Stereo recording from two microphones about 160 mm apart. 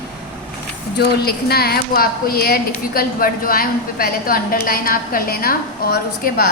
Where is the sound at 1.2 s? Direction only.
75° left (ahead or behind).